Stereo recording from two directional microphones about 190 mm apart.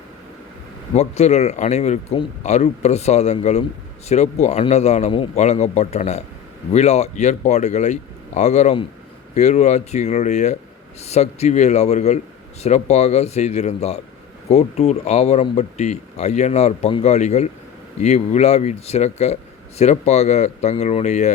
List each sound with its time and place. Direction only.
0.9 s speech: 35° left (ahead or behind)